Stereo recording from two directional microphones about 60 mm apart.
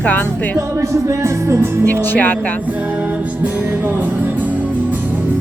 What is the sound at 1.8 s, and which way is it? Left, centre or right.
Speech, left.